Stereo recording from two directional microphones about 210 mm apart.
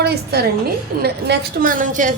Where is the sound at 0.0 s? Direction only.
50° right (ahead or behind).